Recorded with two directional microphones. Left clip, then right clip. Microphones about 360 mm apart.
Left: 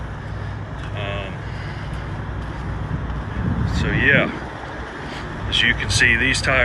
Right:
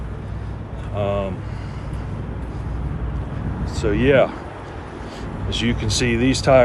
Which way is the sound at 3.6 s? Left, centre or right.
Centre.